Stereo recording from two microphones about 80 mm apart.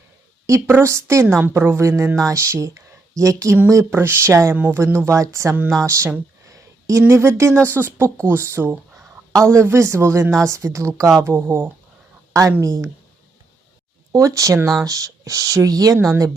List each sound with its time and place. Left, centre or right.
0.4 s a woman's voice: right
3.8 s a woman's voice: right
7.1 s a woman's voice: right
11.3 s speech: right
12.3 s a woman's voice: right
14.1 s a woman's voice: right